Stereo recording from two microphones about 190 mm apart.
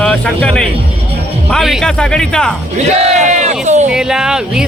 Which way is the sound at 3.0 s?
35° right (ahead or behind).